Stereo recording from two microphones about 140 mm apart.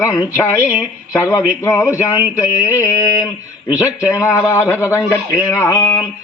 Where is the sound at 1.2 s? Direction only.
20° left (ahead or behind).